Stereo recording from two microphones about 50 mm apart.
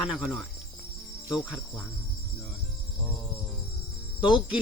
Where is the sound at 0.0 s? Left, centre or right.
Centre.